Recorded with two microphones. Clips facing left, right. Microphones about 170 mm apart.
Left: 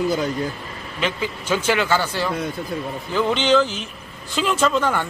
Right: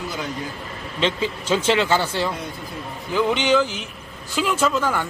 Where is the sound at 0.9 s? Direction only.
25° right (ahead or behind).